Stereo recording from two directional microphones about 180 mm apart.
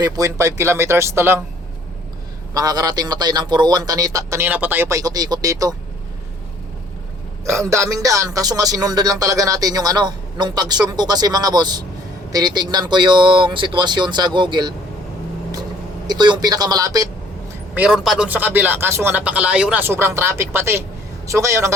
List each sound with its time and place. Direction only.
0.0 s speech: 20° right (ahead or behind)
2.5 s speech: 20° right (ahead or behind)
7.4 s speech: 15° right (ahead or behind)
16.0 s speech: 25° right (ahead or behind)
17.7 s speech: 5° right (ahead or behind)